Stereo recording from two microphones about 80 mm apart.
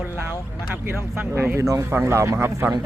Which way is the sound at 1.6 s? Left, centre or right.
Right.